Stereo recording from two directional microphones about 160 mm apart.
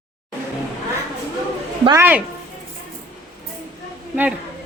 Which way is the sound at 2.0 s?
10° right (ahead or behind).